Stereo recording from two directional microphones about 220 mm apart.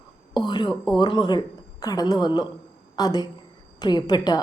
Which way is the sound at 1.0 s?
20° left (ahead or behind).